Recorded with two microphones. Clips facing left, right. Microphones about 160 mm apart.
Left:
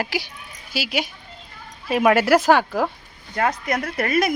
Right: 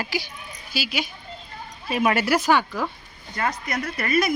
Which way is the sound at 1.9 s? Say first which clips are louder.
Left 5 dB; 90° left.